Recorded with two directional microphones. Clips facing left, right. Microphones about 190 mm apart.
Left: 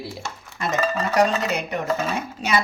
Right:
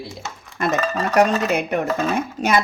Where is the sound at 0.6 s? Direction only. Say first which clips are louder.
Right 2 dB; 55° right (ahead or behind).